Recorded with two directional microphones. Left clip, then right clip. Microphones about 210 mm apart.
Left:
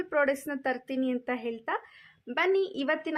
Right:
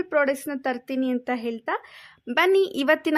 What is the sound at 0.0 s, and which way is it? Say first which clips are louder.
Speech: right 4 dB; 30° right (ahead or behind).